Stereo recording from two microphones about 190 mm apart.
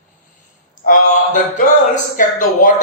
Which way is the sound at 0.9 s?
45° left (ahead or behind).